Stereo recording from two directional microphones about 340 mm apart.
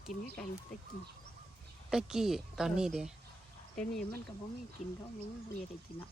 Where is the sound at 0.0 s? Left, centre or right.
Centre.